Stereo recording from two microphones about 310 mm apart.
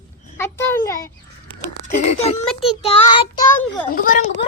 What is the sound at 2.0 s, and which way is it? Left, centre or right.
Speech, left.